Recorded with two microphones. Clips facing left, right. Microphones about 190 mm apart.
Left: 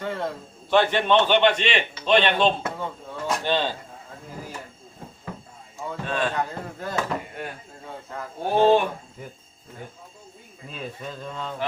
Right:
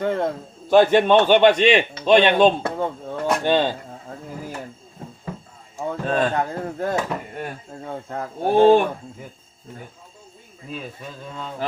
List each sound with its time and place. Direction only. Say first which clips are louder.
0.0 s a man's voice: right 7 dB; 50° right (ahead or behind)
2.7 s a sound: right 7 dB; 50° right (ahead or behind)
5.7 s speech: right 6 dB; 40° right (ahead or behind)
8.1 s a man's voice: right 5 dB; 50° right (ahead or behind)